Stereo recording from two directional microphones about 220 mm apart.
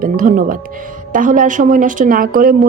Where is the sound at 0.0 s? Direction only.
40° right (ahead or behind).